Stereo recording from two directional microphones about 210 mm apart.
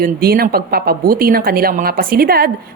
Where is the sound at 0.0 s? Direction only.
45° right (ahead or behind).